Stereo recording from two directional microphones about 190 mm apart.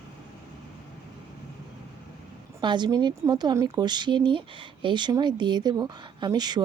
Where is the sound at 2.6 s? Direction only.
25° right (ahead or behind).